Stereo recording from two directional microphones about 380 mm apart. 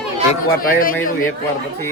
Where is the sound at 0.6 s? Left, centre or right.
Left.